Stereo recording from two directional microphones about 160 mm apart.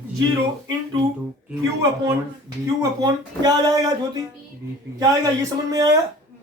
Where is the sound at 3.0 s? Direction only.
25° right (ahead or behind).